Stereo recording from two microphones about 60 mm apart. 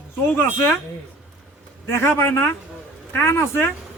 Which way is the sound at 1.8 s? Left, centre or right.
Left.